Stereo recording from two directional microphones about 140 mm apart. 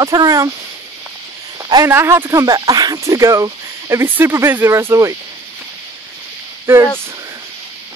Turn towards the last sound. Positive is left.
turn(degrees=-20)  # may be behind; listen again after turning